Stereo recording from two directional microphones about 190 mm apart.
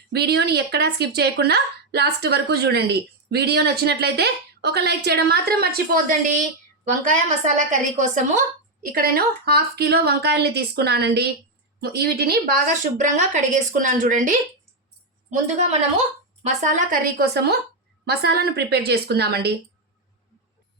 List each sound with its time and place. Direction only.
0.1 s a woman's voice: 55° right (ahead or behind); by 8.4 s 40° right (ahead or behind)
8.8 s a woman's voice: 50° right (ahead or behind)
16.4 s a woman's voice: 45° right (ahead or behind)